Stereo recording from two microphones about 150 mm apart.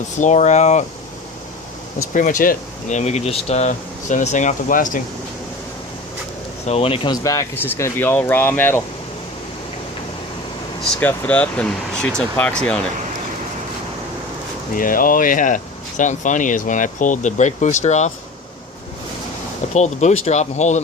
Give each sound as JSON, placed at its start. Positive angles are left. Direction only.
{"t": 0.2, "sound": "speech", "side_deg": 50}
{"t": 2.1, "sound": "speech", "side_deg": 60}
{"t": 3.0, "sound": "speech", "side_deg": 50}
{"t": 6.7, "sound": "speech", "side_deg": 40}
{"t": 7.2, "sound": "speech", "side_deg": 20}
{"t": 10.8, "sound": "speech", "side_deg": 5}
{"t": 14.8, "sound": "speech", "side_deg": 70}
{"t": 19.7, "sound": "speech", "side_deg": 50}